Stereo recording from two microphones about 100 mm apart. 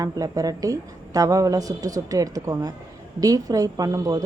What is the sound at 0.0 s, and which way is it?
A woman's voice, 35° right (ahead or behind).